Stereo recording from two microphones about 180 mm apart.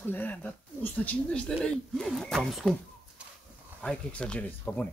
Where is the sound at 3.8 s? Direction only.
5° left (ahead or behind).